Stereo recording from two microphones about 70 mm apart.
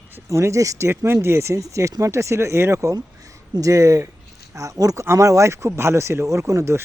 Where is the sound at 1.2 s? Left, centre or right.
Right.